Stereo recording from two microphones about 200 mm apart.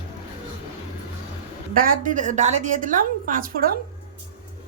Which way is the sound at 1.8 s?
40° right (ahead or behind).